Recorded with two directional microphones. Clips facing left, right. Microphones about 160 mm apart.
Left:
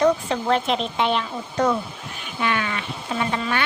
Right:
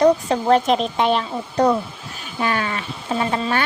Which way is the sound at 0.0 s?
35° right (ahead or behind).